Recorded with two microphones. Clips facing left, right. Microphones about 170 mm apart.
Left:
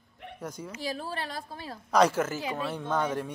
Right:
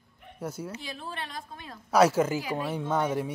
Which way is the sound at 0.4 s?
10° right (ahead or behind).